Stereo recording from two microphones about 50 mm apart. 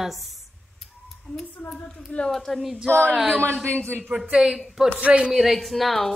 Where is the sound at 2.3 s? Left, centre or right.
Centre.